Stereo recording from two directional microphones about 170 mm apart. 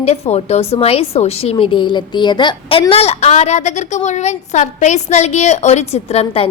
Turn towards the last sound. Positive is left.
turn(degrees=35)  # may be behind; listen again after turning